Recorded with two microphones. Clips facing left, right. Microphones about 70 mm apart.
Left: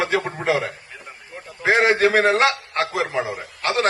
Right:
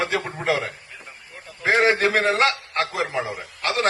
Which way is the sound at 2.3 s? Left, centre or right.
Left.